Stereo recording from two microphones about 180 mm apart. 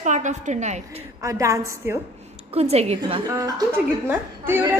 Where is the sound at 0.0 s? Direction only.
40° right (ahead or behind).